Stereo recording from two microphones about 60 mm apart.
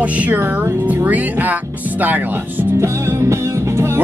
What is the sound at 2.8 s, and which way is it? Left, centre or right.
Music, right.